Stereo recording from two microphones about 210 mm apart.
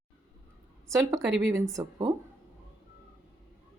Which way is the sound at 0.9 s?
15° right (ahead or behind).